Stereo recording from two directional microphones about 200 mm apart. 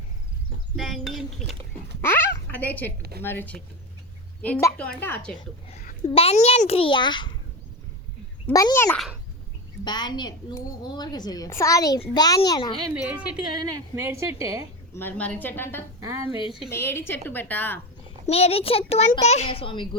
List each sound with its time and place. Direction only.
0.8 s speech: centre (ahead or behind)
3.0 s a woman's voice: 50° right (ahead or behind)
3.2 s a woman's voice: 10° left (ahead or behind)
5.7 s a child's voice: 30° left (ahead or behind)
8.4 s a woman's voice: 15° left (ahead or behind)
12.9 s a woman's voice: 5° right (ahead or behind)
14.9 s a woman's voice: 10° left (ahead or behind)
16.2 s a woman's voice: 25° left (ahead or behind)
16.6 s a woman's voice: 10° left (ahead or behind)
18.3 s a woman's voice: 30° left (ahead or behind)